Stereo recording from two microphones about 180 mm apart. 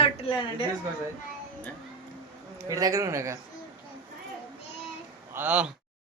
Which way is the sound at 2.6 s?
20° right (ahead or behind).